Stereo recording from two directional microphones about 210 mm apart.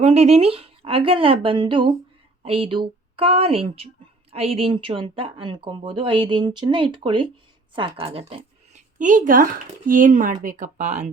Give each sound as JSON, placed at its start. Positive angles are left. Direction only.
{"t": 0.0, "sound": "speech", "side_deg": -30}